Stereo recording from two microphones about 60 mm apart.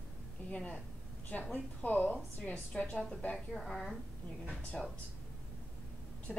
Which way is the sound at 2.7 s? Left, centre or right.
Centre.